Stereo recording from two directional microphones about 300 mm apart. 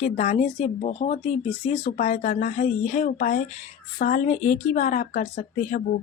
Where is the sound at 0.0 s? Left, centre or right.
Left.